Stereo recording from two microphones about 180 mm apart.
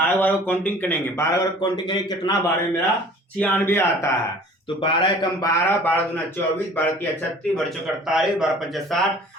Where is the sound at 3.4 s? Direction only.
10° left (ahead or behind).